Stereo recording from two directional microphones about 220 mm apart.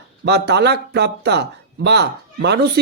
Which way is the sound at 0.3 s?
50° right (ahead or behind).